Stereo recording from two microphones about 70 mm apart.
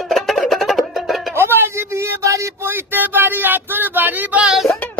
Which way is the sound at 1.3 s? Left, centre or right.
Right.